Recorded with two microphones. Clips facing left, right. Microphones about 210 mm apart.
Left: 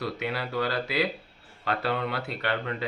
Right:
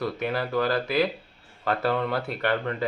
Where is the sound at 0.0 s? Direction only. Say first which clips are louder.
Right 4 dB; 50° right (ahead or behind).